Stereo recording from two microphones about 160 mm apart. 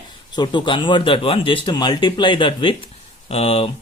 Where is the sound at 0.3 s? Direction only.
30° left (ahead or behind).